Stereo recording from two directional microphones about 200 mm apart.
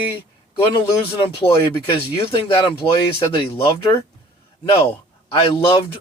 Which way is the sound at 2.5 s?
25° left (ahead or behind).